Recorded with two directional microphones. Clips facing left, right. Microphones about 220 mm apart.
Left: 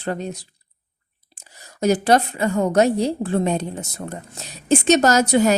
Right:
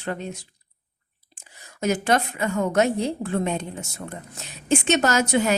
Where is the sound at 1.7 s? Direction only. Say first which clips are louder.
Left 5 dB; 35° left (ahead or behind).